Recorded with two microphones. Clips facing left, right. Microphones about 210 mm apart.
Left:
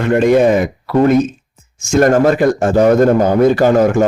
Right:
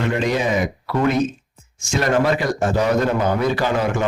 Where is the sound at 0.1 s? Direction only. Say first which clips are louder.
Left 14 dB; 50° left (ahead or behind).